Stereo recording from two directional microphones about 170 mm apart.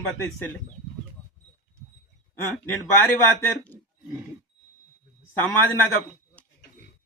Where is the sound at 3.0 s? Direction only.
10° left (ahead or behind).